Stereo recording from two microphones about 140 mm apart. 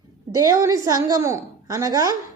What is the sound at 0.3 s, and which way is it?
A woman's voice, 25° right (ahead or behind).